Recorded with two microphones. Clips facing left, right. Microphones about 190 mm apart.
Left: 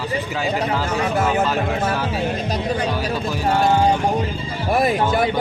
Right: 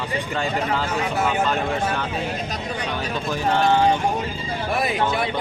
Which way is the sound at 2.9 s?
10° left (ahead or behind).